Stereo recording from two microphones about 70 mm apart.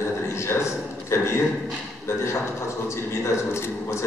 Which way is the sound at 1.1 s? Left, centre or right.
Left.